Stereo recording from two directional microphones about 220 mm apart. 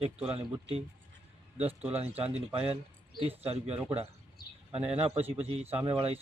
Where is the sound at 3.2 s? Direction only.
25° right (ahead or behind).